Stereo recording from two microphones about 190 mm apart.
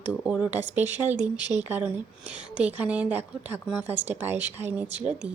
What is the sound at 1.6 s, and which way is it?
Speech, 10° right (ahead or behind).